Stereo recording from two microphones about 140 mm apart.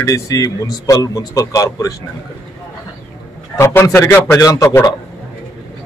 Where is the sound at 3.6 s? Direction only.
20° left (ahead or behind).